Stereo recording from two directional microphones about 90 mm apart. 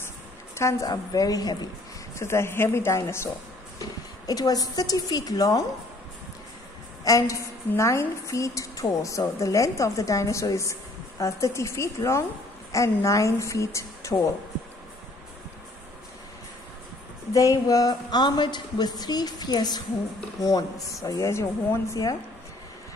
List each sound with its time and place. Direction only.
0.6 s a woman's voice: 35° left (ahead or behind)
0.8 s speech: 45° left (ahead or behind)
2.1 s a woman's voice: 30° left (ahead or behind)
4.3 s speech: 45° left (ahead or behind)
7.1 s a woman's voice: 35° left (ahead or behind)
17.3 s a woman's voice: 40° left (ahead or behind)